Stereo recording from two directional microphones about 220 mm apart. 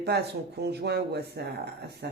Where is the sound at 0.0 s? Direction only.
50° right (ahead or behind).